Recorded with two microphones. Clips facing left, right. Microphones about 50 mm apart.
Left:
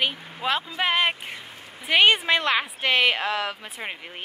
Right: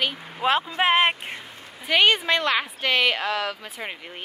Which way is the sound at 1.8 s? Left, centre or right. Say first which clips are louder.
Left 1 dB; centre.